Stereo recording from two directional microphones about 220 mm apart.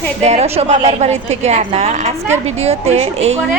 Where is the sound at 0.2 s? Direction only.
30° right (ahead or behind).